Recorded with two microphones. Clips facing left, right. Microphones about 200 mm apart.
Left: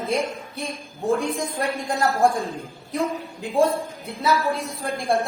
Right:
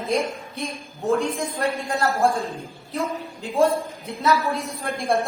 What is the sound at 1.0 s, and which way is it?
A woman's voice, 10° left (ahead or behind).